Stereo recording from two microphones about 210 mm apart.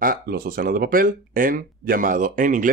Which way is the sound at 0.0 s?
45° right (ahead or behind).